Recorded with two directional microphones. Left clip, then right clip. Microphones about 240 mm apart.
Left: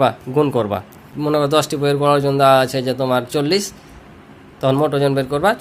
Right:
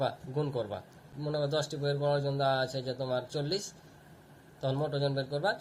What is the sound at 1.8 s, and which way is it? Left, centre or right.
Speech, left.